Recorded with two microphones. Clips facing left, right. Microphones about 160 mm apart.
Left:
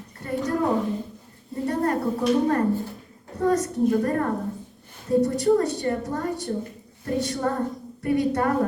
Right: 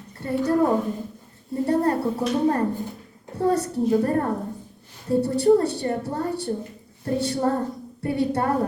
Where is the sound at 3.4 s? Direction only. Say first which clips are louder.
Even; 30° right (ahead or behind).